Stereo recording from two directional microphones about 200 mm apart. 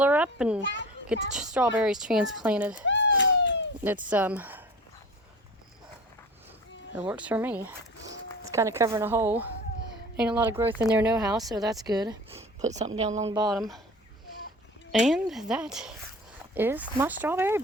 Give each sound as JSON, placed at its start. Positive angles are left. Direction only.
{"t": 0.0, "sound": "speech", "side_deg": -5}
{"t": 0.6, "sound": "a child's voice", "side_deg": 65}
{"t": 1.0, "sound": "a woman's voice", "side_deg": -5}
{"t": 2.8, "sound": "cat", "side_deg": 65}
{"t": 4.1, "sound": "speech", "side_deg": -5}
{"t": 6.9, "sound": "speech", "side_deg": -5}
{"t": 13.0, "sound": "speech", "side_deg": -35}
{"t": 13.5, "sound": "a woman's voice", "side_deg": 0}
{"t": 14.9, "sound": "a woman's voice", "side_deg": 0}